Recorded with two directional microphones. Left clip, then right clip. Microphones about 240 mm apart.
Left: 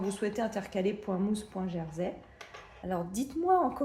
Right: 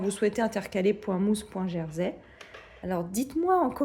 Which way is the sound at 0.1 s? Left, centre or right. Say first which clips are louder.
Right 8 dB; right.